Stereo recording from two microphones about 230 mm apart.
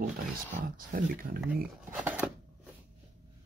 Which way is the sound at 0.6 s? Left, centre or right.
Right.